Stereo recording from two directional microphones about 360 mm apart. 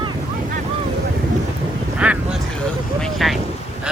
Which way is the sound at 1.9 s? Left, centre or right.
Centre.